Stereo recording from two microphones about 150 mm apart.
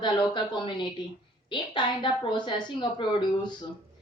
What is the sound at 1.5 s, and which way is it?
A woman's voice, 30° left (ahead or behind).